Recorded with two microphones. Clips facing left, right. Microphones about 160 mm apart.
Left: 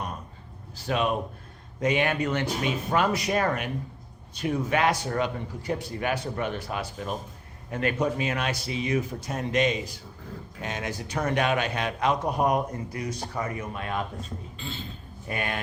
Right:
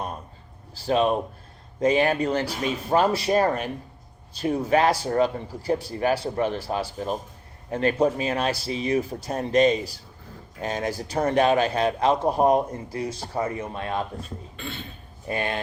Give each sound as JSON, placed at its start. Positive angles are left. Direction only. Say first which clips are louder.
{"t": 0.8, "sound": "a man's voice", "louder": "right 5 dB", "side_deg": -30}
{"t": 14.5, "sound": "speech", "louder": "right 3 dB", "side_deg": -65}
{"t": 15.3, "sound": "a man's voice", "louder": "right 4 dB", "side_deg": -30}